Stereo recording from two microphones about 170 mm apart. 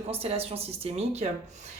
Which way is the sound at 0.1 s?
35° right (ahead or behind).